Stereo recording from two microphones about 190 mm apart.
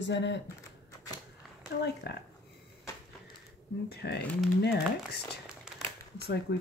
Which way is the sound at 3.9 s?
55° left (ahead or behind).